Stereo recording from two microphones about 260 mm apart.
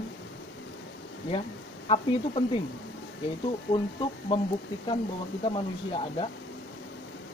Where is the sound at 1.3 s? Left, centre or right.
Left.